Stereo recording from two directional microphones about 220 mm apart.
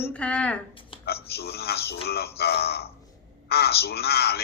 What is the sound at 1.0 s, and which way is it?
Speech, 45° left (ahead or behind).